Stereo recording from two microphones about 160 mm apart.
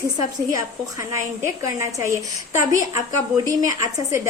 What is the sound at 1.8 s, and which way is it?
A woman's voice, 15° right (ahead or behind).